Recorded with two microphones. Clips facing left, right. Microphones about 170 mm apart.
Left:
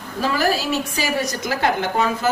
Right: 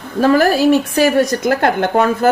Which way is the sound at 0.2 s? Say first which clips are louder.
Right 9 dB; 55° right (ahead or behind).